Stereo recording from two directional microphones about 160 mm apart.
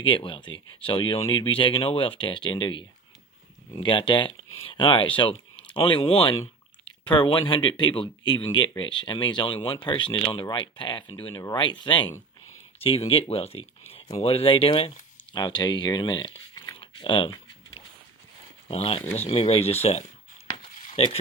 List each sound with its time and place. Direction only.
0.0 s speech: 30° left (ahead or behind)
16.7 s a sound: 30° left (ahead or behind)
18.7 s speech: 35° left (ahead or behind)